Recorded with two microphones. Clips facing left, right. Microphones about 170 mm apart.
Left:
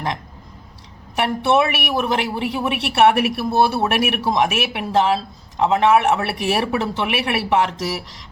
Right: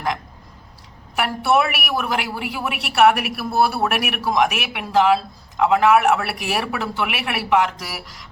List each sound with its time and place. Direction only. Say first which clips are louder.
1.1 s speech: left 1 dB; 25° left (ahead or behind)